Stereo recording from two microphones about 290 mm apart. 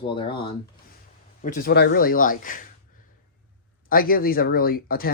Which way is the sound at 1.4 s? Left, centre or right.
Left.